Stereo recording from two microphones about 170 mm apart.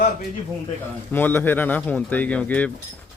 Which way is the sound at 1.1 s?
10° left (ahead or behind).